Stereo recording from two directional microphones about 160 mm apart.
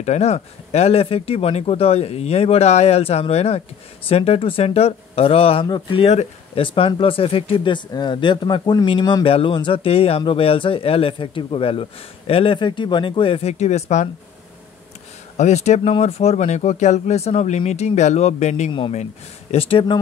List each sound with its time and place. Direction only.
0.0 s speech: 45° left (ahead or behind)
15.3 s speech: 45° left (ahead or behind)
18.7 s speech: 30° left (ahead or behind)